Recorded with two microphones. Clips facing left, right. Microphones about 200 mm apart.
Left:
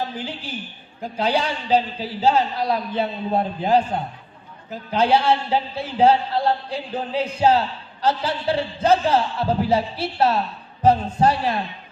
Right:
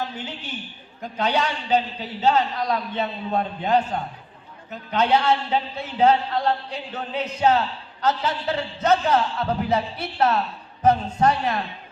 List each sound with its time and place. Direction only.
0.2 s a man's voice: 30° left (ahead or behind)